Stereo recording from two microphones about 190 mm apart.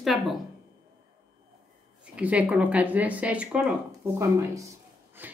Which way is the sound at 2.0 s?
5° right (ahead or behind).